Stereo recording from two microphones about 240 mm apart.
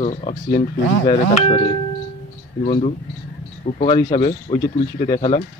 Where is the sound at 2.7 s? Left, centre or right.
Left.